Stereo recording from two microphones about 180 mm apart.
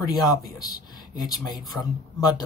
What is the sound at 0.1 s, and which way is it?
Speech, 20° left (ahead or behind).